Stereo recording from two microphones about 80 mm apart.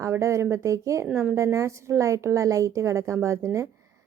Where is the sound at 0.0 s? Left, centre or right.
Right.